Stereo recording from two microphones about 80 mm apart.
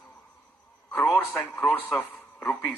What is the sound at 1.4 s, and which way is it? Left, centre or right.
Speech, centre.